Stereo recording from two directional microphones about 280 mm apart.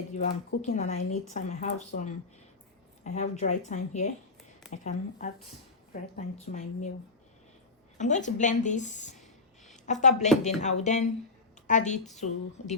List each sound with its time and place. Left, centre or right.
0.2 s speech: left
7.9 s speech: left